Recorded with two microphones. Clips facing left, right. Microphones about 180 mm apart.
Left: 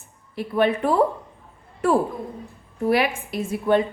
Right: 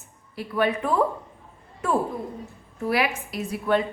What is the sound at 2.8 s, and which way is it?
Speech, 30° left (ahead or behind).